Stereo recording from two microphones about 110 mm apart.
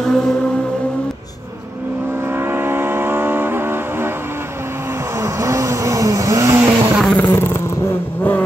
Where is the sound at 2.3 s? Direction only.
20° right (ahead or behind).